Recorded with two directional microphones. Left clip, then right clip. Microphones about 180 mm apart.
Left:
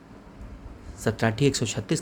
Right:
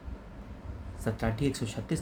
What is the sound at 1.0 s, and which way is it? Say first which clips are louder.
Speech: left 8 dB; 60° left (ahead or behind).